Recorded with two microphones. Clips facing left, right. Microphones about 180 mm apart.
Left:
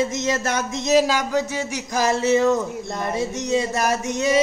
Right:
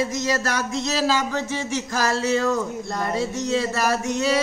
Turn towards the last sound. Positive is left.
turn(degrees=20)  # may be behind; listen again after turning